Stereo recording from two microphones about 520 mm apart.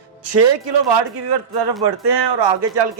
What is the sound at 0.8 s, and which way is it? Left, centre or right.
Speech, right.